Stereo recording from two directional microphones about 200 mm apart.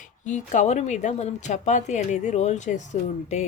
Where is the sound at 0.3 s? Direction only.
35° left (ahead or behind).